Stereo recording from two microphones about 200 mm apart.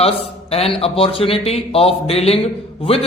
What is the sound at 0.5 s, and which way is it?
A man's voice, 30° left (ahead or behind).